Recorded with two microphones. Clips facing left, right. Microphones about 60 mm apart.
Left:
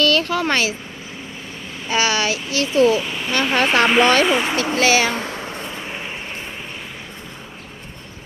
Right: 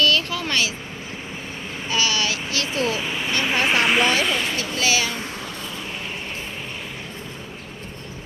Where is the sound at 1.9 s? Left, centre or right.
Left.